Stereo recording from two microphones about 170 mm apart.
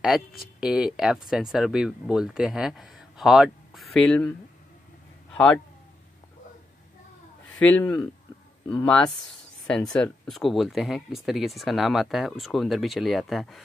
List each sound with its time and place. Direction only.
0.0 s speech: centre (ahead or behind)
5.3 s a man's voice: 5° left (ahead or behind)
7.6 s speech: 10° left (ahead or behind)